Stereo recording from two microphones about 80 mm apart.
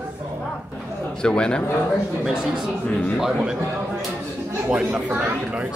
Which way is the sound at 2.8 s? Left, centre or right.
Centre.